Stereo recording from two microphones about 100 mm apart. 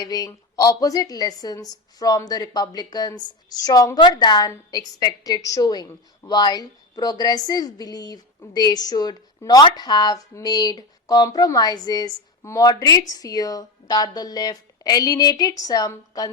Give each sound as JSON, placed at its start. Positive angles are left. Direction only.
{"t": 0.0, "sound": "a woman's voice", "side_deg": 40}